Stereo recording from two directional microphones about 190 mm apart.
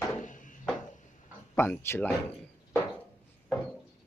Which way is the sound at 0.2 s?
45° left (ahead or behind).